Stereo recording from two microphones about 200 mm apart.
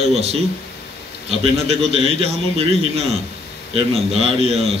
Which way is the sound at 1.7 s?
30° right (ahead or behind).